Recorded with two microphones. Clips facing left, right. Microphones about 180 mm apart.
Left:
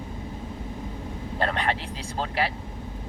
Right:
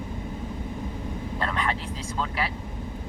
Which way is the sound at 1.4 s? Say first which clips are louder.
Left 3 dB; 30° left (ahead or behind).